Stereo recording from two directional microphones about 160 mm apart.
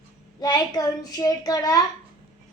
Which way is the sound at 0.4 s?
25° left (ahead or behind).